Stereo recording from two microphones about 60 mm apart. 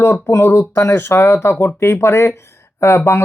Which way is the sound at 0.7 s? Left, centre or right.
Left.